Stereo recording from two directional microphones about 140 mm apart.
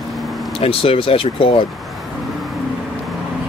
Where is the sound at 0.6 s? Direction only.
40° left (ahead or behind).